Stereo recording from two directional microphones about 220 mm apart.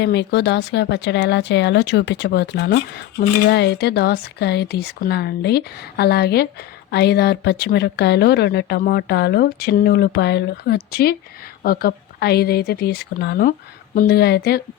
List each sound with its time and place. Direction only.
0.0 s speech: 50° left (ahead or behind)